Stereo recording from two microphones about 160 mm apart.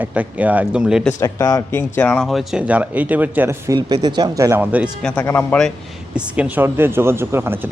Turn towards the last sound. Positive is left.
turn(degrees=-15)  # may be behind; listen again after turning